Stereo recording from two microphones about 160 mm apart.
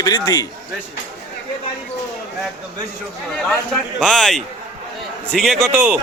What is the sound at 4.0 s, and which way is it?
A man's voice, 5° left (ahead or behind).